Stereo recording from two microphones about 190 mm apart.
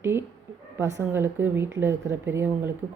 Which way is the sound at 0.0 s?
10° right (ahead or behind).